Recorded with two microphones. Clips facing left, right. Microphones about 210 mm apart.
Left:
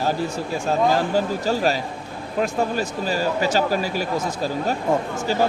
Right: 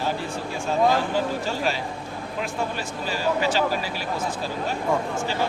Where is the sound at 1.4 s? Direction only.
40° left (ahead or behind).